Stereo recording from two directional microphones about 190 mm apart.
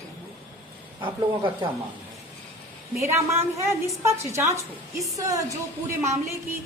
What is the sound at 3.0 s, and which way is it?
A woman's voice, 15° right (ahead or behind).